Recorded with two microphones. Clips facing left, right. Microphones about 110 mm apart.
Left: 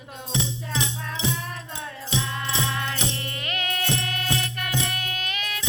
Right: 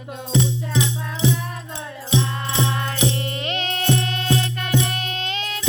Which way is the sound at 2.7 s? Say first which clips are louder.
Right 6 dB; 25° right (ahead or behind).